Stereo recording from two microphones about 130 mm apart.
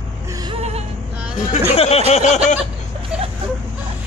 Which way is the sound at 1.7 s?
50° left (ahead or behind).